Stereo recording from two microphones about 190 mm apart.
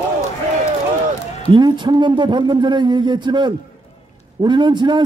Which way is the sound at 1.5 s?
25° right (ahead or behind).